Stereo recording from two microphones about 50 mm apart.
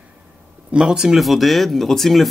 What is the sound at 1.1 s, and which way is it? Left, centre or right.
Speech, centre.